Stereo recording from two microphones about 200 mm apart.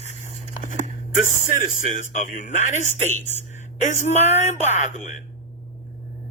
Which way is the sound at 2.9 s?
35° right (ahead or behind).